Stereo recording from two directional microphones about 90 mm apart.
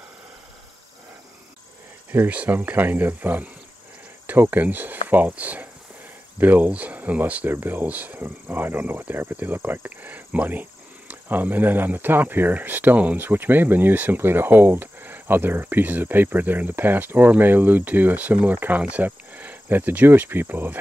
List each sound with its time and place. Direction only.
2.1 s speech: 15° right (ahead or behind)